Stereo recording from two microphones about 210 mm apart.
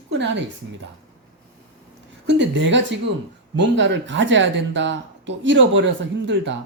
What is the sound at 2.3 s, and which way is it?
Speech, 55° right (ahead or behind).